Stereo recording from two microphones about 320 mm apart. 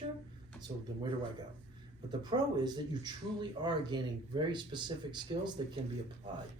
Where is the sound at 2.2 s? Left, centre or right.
Centre.